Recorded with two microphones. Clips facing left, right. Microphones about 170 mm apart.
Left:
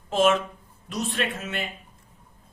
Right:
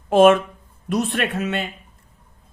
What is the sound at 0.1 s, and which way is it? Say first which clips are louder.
Speech: right 8 dB; 60° right (ahead or behind).